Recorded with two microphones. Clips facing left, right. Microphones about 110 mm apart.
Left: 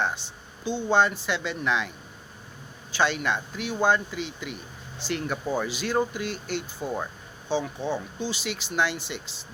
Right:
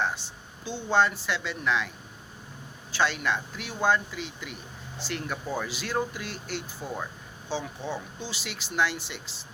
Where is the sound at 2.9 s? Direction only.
Centre (ahead or behind).